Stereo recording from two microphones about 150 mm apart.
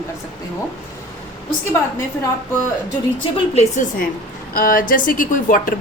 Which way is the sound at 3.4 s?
50° left (ahead or behind).